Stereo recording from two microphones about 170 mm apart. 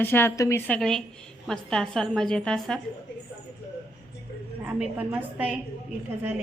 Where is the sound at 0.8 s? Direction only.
5° left (ahead or behind).